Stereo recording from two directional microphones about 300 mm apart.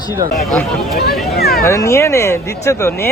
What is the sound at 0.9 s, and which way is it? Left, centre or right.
Speech, left.